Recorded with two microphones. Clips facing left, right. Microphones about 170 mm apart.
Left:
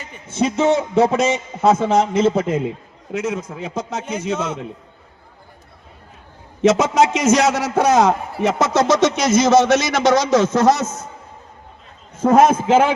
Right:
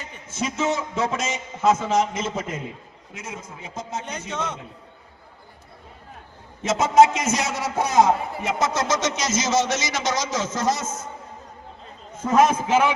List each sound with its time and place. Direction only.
0.3 s a man's voice: 30° left (ahead or behind)
3.1 s a man's voice: 75° left (ahead or behind)
4.4 s a man's voice: 5° left (ahead or behind)
6.6 s a man's voice: 75° left (ahead or behind)
12.5 s a man's voice: 50° left (ahead or behind)